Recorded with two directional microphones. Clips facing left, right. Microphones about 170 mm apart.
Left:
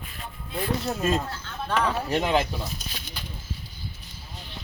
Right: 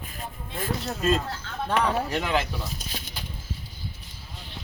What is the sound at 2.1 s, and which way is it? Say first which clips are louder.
Speech: left 3 dB; 25° left (ahead or behind).